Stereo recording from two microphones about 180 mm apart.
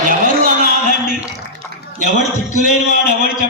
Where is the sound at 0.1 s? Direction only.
50° right (ahead or behind).